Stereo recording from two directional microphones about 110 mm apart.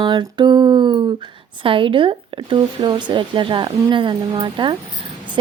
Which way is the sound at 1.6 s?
55° right (ahead or behind).